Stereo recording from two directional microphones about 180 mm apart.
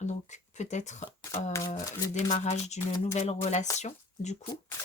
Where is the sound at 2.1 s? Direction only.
40° left (ahead or behind).